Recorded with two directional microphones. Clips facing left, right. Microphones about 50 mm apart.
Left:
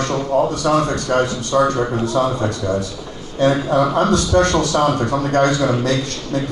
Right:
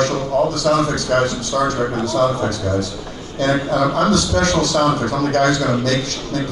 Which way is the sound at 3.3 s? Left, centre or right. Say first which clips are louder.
Left 2 dB; left.